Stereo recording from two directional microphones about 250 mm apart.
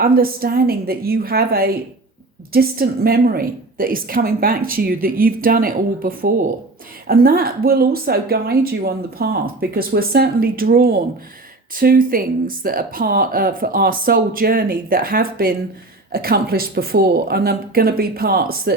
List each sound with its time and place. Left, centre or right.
0.0 s a woman's voice: right